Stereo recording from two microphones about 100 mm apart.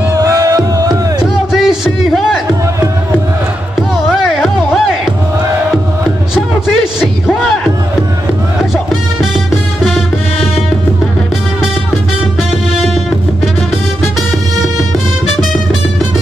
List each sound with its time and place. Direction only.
0.1 s music: 35° right (ahead or behind)
1.2 s a sound: 5° right (ahead or behind)
3.9 s music: 5° right (ahead or behind)
9.8 s music: 5° right (ahead or behind)